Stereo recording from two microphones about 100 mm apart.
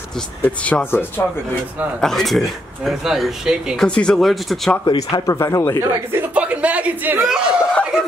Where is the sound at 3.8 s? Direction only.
5° left (ahead or behind).